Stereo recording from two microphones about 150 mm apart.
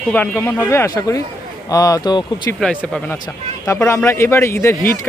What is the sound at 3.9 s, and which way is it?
Speech, 20° left (ahead or behind).